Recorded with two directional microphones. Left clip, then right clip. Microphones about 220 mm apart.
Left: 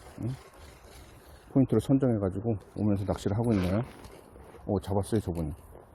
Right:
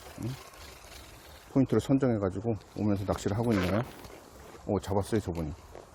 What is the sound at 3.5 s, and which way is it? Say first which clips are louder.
Speech: right 1 dB; 15° right (ahead or behind).